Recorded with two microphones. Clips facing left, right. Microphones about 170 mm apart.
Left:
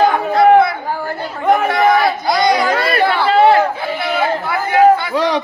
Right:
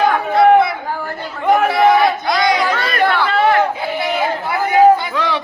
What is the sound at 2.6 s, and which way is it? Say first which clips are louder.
Chatter: left 3 dB; 35° left (ahead or behind).